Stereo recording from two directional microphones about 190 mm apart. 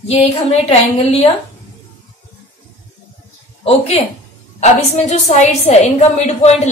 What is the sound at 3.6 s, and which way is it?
A woman's voice, 30° left (ahead or behind).